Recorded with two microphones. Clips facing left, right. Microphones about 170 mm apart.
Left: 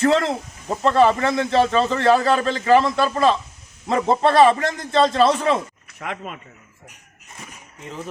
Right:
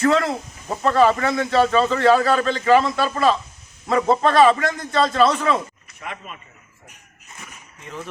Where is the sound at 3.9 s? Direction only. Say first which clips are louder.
Even; 25° left (ahead or behind).